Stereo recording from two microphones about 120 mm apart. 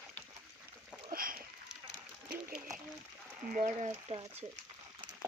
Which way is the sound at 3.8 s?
55° right (ahead or behind).